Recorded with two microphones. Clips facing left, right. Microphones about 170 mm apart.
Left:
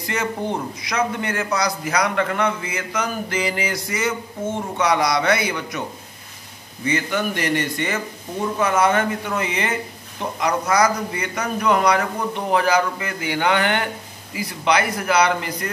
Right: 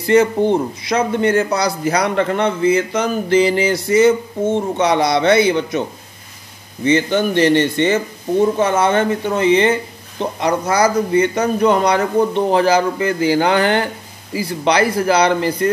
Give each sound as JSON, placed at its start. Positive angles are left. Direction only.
{"t": 0.0, "sound": "a man's voice", "side_deg": -30}